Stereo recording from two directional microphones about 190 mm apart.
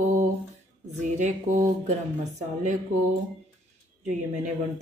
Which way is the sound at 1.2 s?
40° right (ahead or behind).